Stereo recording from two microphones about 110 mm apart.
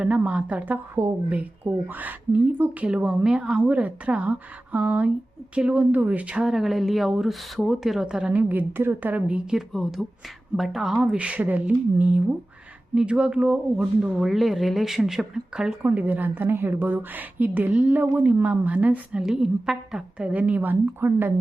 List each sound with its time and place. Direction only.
0.2 s speech: 15° right (ahead or behind)
15.8 s speech: 15° right (ahead or behind)